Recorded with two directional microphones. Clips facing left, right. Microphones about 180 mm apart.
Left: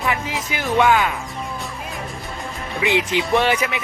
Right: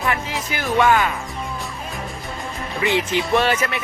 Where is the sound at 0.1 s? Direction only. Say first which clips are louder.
Even; 15° left (ahead or behind).